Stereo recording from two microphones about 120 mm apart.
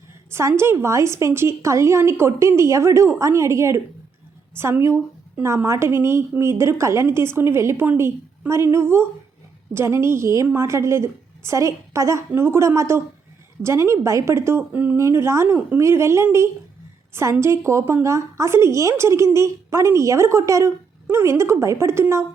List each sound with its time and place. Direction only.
0.3 s a woman's voice: 20° right (ahead or behind)
17.3 s a woman's voice: 20° right (ahead or behind)